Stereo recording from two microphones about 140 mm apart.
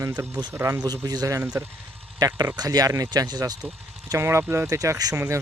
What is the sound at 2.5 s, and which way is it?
Speech, 30° right (ahead or behind).